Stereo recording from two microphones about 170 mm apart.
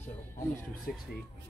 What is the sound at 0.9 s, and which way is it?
Speech, 60° left (ahead or behind).